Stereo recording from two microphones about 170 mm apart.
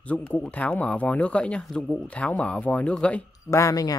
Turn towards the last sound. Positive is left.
turn(degrees=20)  # may be behind; listen again after turning